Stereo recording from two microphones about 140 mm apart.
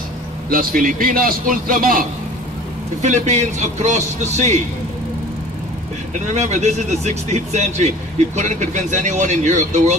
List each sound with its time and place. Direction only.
0.5 s a man's voice: 85° right
3.0 s a man's voice: 55° right (ahead or behind)
6.1 s a man's voice: 60° right (ahead or behind)